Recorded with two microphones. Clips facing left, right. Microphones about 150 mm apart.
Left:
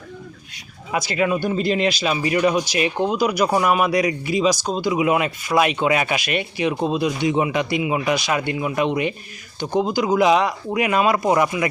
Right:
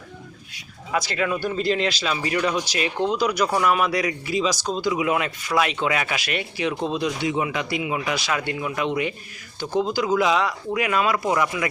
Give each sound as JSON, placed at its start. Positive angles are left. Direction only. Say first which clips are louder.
{"t": 0.9, "sound": "speech", "louder": "left 3 dB", "side_deg": 15}
{"t": 7.3, "sound": "speech", "louder": "left 5 dB", "side_deg": 20}